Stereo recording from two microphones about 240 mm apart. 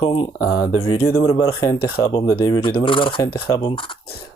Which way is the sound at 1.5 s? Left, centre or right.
Centre.